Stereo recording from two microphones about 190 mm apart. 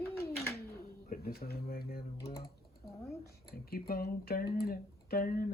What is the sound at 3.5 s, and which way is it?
Speech, 55° left (ahead or behind).